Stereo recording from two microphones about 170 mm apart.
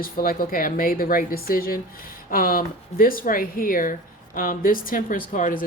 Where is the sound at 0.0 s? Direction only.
55° left (ahead or behind).